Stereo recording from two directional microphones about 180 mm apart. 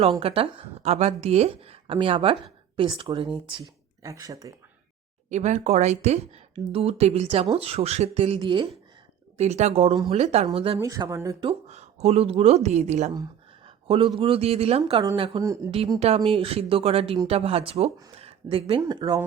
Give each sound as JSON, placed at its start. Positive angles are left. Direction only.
{"t": 0.0, "sound": "a woman's voice", "side_deg": -30}
{"t": 4.0, "sound": "speech", "side_deg": -20}
{"t": 5.3, "sound": "a woman's voice", "side_deg": -40}
{"t": 9.4, "sound": "a woman's voice", "side_deg": -40}
{"t": 10.8, "sound": "speech", "side_deg": -15}
{"t": 11.4, "sound": "a woman's voice", "side_deg": -35}
{"t": 13.7, "sound": "a sound", "side_deg": -30}
{"t": 14.2, "sound": "a woman's voice", "side_deg": -30}
{"t": 15.4, "sound": "speech", "side_deg": -15}
{"t": 16.0, "sound": "a woman's voice", "side_deg": -35}
{"t": 18.2, "sound": "a sound", "side_deg": -35}
{"t": 18.8, "sound": "speech", "side_deg": -20}